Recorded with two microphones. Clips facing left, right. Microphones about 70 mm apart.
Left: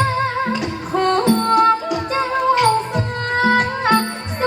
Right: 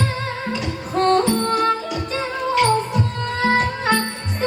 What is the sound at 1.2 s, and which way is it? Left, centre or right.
Music, left.